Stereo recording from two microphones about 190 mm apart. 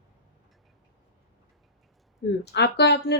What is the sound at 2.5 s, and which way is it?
Speech, 60° left (ahead or behind).